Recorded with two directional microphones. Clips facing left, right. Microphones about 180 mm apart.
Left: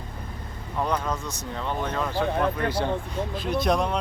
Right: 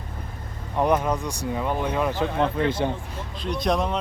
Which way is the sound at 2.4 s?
25° right (ahead or behind).